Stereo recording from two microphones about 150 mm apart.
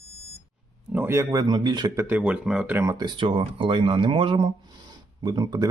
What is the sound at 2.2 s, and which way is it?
Speech, 5° right (ahead or behind).